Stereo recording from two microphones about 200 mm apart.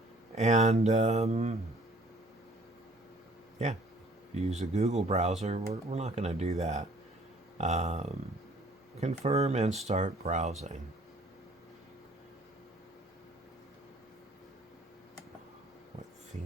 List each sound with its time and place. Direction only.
0.3 s speech: 35° right (ahead or behind)
3.6 s speech: 35° right (ahead or behind)